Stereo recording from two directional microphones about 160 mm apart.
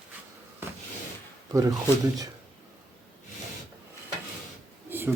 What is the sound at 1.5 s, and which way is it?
Speech, 20° right (ahead or behind).